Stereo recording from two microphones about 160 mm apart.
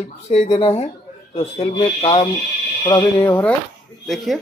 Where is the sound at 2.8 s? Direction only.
25° left (ahead or behind).